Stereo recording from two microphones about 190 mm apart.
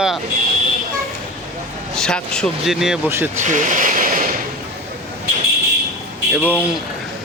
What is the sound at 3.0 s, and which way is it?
Speech, 10° right (ahead or behind).